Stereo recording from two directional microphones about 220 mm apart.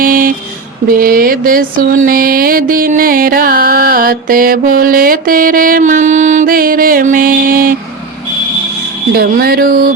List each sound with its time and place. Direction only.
0.0 s speech: 40° right (ahead or behind)
0.9 s mantra: 40° right (ahead or behind)
9.1 s a sound: 40° right (ahead or behind)